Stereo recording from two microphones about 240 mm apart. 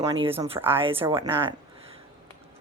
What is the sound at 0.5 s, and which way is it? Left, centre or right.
Speech, centre.